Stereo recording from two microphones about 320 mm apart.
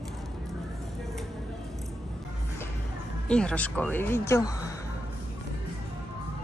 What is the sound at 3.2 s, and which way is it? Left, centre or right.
Speech, centre.